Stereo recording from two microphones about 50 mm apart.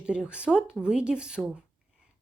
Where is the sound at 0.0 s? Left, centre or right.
Right.